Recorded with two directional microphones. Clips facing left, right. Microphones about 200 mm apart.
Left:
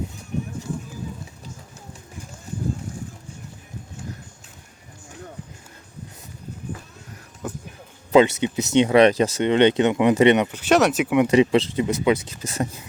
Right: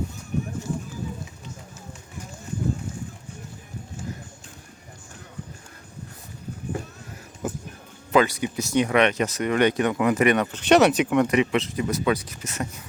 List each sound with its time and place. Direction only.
7.4 s music: 5° right (ahead or behind)
8.1 s speech: 25° left (ahead or behind)
10.4 s speech: 10° left (ahead or behind)
11.3 s speech: 30° left (ahead or behind)